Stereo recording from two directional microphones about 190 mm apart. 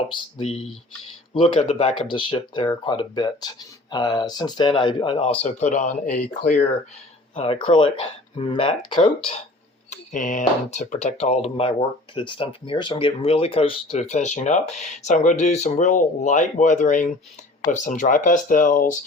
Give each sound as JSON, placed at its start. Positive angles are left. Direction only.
{"t": 0.1, "sound": "speech", "side_deg": 30}
{"t": 9.9, "sound": "speech", "side_deg": 40}